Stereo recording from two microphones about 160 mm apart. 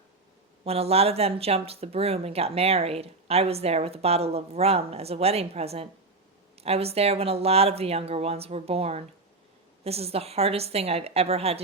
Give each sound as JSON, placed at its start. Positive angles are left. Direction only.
{"t": 0.6, "sound": "speech", "side_deg": -40}